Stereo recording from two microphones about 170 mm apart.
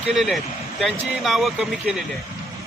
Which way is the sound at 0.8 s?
Centre (ahead or behind).